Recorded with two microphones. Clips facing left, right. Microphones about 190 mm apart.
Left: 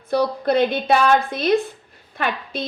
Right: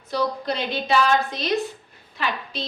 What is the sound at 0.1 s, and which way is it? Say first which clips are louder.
A woman's voice: left 6 dB; 55° left (ahead or behind).